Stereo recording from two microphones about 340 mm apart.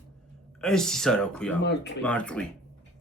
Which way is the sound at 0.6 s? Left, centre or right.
Centre.